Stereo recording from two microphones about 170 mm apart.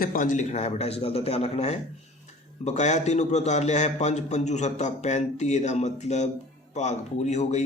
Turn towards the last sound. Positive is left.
turn(degrees=45)  # may be behind; listen again after turning